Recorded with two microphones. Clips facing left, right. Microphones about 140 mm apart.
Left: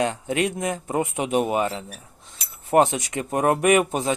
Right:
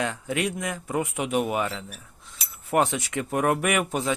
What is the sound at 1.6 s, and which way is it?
Speech, 40° left (ahead or behind).